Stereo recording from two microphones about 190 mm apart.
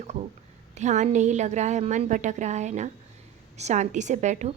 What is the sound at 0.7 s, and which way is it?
A woman's voice, 40° right (ahead or behind).